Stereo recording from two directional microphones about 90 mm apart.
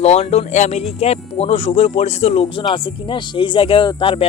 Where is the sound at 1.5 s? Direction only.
90° left.